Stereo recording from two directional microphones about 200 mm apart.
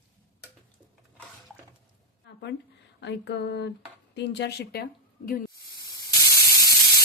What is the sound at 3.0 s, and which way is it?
Speech, 60° left (ahead or behind).